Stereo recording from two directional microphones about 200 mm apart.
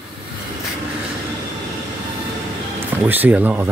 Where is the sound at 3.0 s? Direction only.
10° right (ahead or behind).